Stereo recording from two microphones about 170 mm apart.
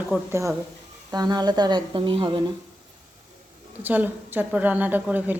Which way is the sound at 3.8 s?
10° right (ahead or behind).